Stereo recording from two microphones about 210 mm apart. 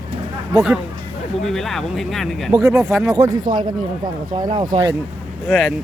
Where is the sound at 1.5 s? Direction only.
Centre (ahead or behind).